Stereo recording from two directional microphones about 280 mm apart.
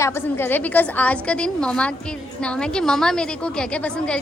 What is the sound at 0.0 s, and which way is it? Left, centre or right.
A woman's voice, centre.